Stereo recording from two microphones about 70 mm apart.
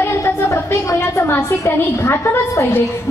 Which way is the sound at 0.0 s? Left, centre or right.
Left.